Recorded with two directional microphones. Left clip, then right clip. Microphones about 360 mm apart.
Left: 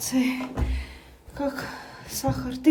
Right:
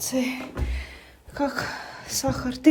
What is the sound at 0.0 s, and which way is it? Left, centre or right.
Speech, centre.